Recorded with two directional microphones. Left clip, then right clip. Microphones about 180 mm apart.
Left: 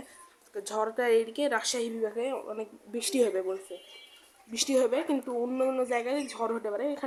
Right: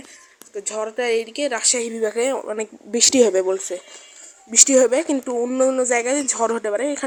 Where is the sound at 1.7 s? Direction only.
35° right (ahead or behind).